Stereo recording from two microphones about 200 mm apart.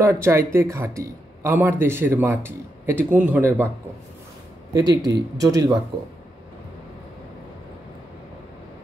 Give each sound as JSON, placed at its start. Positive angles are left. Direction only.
{"t": 0.0, "sound": "speech", "side_deg": -15}
{"t": 4.7, "sound": "speech", "side_deg": -20}